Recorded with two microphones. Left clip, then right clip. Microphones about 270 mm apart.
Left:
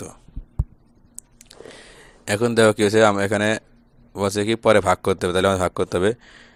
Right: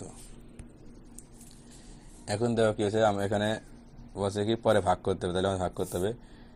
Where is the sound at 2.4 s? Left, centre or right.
Left.